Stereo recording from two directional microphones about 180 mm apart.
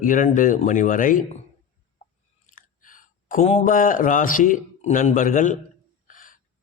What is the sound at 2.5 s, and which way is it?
Speech, 50° left (ahead or behind).